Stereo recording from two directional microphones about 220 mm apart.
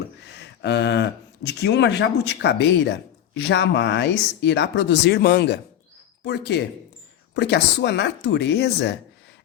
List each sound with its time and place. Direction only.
0.2 s speech: 50° left (ahead or behind)